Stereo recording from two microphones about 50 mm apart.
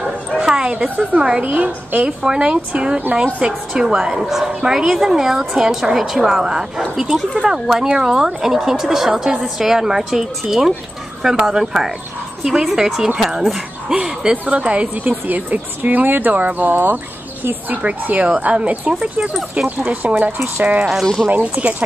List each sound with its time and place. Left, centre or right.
0.0 s bow-wow: centre
0.7 s a woman's voice: right
2.0 s a woman's voice: centre
14.3 s a woman's voice: right
16.7 s speech: right; by 19.3 s centre
19.8 s a woman's voice: right
21.0 s speech: centre
21.3 s speech: right